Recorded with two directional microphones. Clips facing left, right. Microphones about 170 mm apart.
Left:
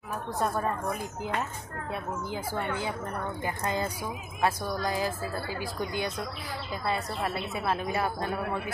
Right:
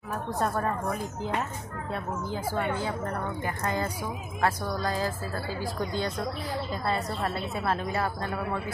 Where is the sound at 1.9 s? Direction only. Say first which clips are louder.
Right 1 dB; 15° left (ahead or behind).